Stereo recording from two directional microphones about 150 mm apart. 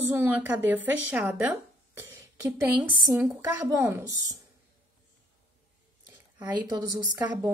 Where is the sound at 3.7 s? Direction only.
15° right (ahead or behind).